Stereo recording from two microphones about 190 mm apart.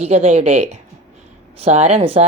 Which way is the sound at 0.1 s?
35° right (ahead or behind).